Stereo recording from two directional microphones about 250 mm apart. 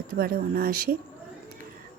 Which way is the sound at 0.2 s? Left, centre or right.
Right.